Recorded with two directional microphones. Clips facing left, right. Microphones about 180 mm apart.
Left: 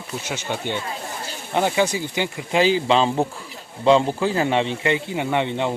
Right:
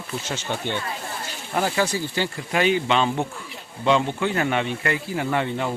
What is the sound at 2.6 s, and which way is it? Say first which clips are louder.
A man's voice: left 3 dB; 30° left (ahead or behind).